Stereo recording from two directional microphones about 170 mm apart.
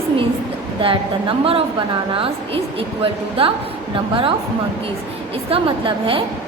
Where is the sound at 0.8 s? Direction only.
30° right (ahead or behind).